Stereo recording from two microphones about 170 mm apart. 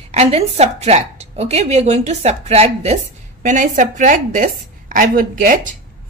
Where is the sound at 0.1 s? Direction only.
40° right (ahead or behind).